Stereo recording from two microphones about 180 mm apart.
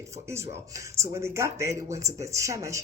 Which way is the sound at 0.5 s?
15° right (ahead or behind).